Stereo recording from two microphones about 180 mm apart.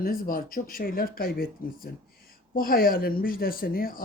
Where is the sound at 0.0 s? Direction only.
50° left (ahead or behind).